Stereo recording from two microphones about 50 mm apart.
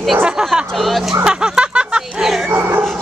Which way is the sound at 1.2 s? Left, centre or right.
Centre.